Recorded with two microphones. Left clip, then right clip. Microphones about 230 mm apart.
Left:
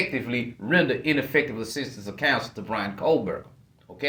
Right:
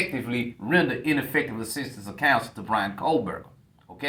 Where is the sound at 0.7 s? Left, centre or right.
Right.